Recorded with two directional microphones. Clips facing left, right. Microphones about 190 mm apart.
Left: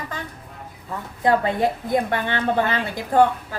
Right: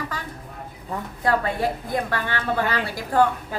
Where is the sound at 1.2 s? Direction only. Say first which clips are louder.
Left 4 dB; 20° left (ahead or behind).